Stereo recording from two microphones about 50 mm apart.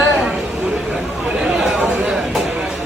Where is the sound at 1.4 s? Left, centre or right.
Centre.